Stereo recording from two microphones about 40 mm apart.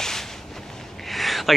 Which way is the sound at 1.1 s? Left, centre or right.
Centre.